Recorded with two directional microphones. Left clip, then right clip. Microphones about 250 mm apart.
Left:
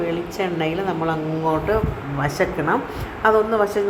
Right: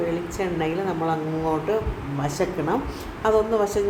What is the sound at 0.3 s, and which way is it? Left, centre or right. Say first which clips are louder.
A woman's voice: left 3 dB; centre.